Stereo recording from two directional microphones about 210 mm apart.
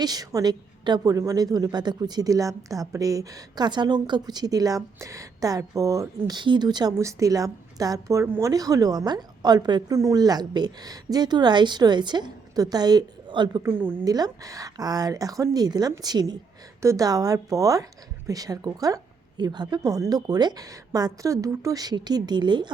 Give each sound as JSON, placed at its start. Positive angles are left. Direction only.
{"t": 0.0, "sound": "a woman's voice", "side_deg": -20}
{"t": 13.6, "sound": "a woman's voice", "side_deg": -10}